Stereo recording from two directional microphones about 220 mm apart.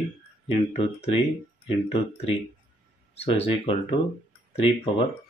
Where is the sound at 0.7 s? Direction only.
30° left (ahead or behind).